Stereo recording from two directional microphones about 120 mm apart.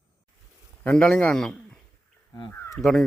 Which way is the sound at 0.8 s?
5° left (ahead or behind).